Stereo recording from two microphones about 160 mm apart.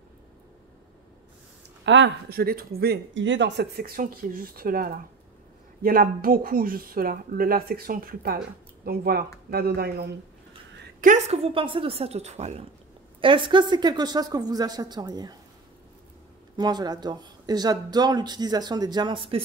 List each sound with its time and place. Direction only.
2.0 s speech: 75° right (ahead or behind)
10.8 s a woman's voice: 55° right (ahead or behind)
13.2 s speech: 30° right (ahead or behind)
16.5 s speech: 25° right (ahead or behind)